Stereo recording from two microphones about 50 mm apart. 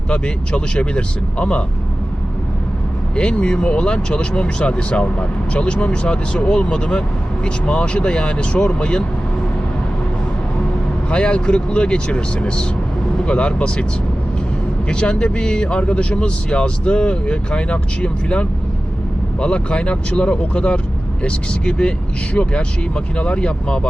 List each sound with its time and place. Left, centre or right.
0.1 s speech: left
3.2 s speech: left
11.1 s speech: left
14.8 s speech: centre
23.1 s speech: left